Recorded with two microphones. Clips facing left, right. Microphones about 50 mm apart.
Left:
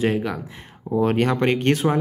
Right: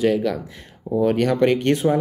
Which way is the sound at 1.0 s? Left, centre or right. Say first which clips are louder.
Right 2 dB; left.